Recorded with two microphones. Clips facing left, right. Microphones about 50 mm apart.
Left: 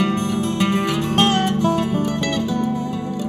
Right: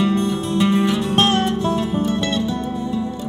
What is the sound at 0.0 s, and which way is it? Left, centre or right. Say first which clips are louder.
Music: right 1 dB; left.